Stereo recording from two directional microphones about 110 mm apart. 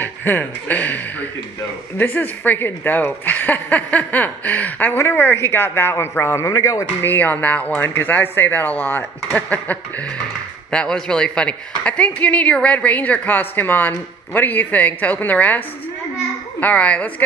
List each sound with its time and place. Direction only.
0.0 s a woman's voice: 20° left (ahead or behind)